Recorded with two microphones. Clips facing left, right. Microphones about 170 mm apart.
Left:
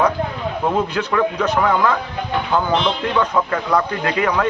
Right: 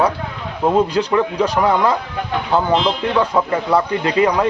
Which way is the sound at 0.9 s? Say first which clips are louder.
Right 4 dB; 25° right (ahead or behind).